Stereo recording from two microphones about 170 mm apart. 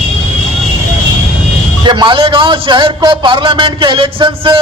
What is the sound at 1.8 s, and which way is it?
A man's voice, 25° right (ahead or behind).